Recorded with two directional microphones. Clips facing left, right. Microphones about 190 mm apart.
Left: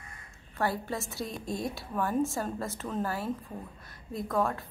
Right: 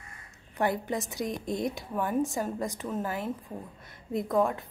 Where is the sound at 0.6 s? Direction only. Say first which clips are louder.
Right 3 dB; 15° right (ahead or behind).